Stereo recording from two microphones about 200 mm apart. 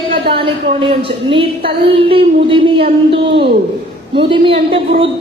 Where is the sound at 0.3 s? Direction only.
25° right (ahead or behind).